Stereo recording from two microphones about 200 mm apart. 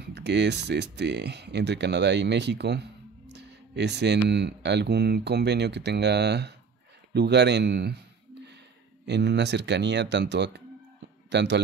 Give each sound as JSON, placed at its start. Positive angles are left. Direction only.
{"t": 0.0, "sound": "speech", "side_deg": -55}
{"t": 3.3, "sound": "music", "side_deg": -55}
{"t": 4.3, "sound": "speech", "side_deg": -55}
{"t": 9.0, "sound": "a man's voice", "side_deg": -60}